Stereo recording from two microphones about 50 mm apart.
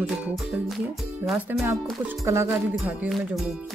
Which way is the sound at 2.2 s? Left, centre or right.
Right.